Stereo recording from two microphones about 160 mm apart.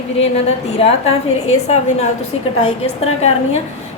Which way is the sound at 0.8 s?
40° left (ahead or behind).